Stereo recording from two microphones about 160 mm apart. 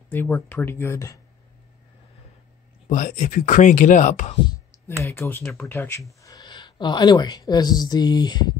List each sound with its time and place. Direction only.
0.1 s speech: 10° left (ahead or behind)
2.9 s speech: 50° left (ahead or behind)
5.0 s speech: 15° left (ahead or behind)
5.4 s speech: centre (ahead or behind)
5.7 s speech: 15° left (ahead or behind)
6.2 s a woman's voice: 25° left (ahead or behind)